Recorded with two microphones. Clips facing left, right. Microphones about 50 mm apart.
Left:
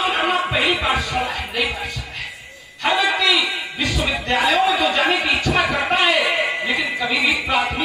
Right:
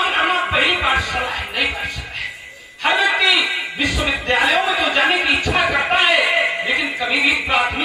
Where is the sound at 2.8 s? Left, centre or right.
Centre.